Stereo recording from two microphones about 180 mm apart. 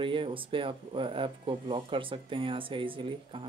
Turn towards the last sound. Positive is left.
turn(degrees=-30)  # may be behind; listen again after turning